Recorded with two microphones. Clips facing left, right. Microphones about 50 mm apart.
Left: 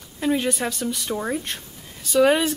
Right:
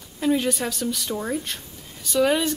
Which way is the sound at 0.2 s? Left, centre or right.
Centre.